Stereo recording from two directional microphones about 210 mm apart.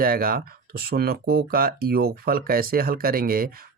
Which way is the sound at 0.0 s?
45° right (ahead or behind).